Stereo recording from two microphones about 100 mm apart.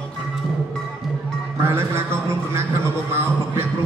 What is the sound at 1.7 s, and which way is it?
Music, 25° right (ahead or behind).